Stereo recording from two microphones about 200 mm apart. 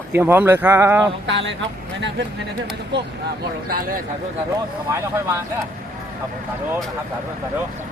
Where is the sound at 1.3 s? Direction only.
65° right (ahead or behind).